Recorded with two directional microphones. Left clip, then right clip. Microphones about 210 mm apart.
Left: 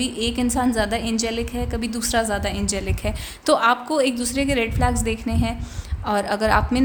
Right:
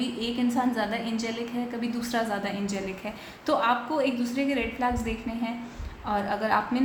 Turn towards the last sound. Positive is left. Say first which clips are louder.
# left 6 dB
turn(degrees=55)  # may be behind; listen again after turning